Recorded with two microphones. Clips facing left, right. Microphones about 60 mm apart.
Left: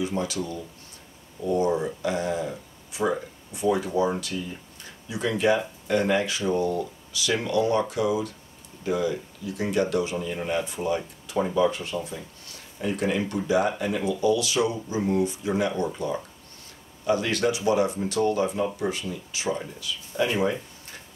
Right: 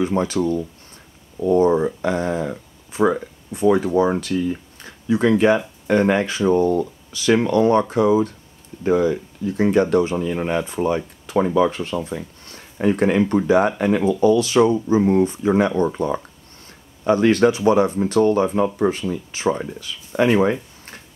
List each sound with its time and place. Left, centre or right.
0.0 s speech: right